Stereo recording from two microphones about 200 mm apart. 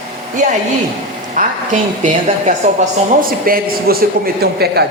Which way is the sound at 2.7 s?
45° right (ahead or behind).